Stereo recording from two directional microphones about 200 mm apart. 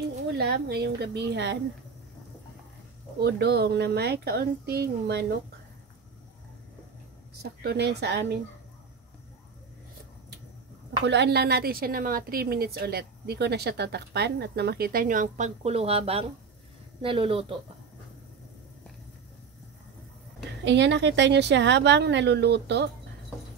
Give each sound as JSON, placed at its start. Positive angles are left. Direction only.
{"t": 0.4, "sound": "a woman's voice", "side_deg": -55}
{"t": 3.2, "sound": "a woman's voice", "side_deg": -55}
{"t": 7.4, "sound": "a woman's voice", "side_deg": -55}
{"t": 11.1, "sound": "a woman's voice", "side_deg": -60}
{"t": 20.6, "sound": "a woman's voice", "side_deg": -60}